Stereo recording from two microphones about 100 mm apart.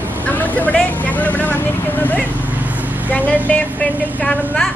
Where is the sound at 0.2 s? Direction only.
15° left (ahead or behind).